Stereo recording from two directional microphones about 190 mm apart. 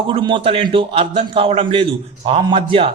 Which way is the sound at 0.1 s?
25° right (ahead or behind).